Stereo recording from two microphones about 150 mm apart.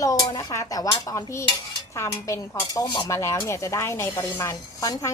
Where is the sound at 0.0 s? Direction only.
25° left (ahead or behind).